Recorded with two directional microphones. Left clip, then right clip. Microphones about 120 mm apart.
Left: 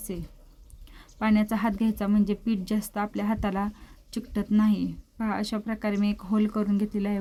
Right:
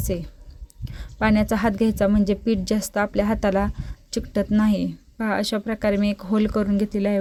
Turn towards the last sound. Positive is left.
turn(degrees=-35)  # may be behind; listen again after turning